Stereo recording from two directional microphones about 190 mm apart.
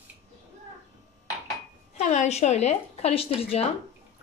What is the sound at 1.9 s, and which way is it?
A woman's voice, 40° left (ahead or behind).